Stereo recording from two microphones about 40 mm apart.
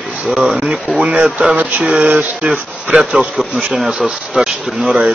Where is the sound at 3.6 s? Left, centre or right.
Centre.